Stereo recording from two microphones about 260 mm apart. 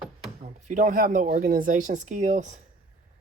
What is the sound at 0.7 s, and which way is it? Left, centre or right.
Speech, right.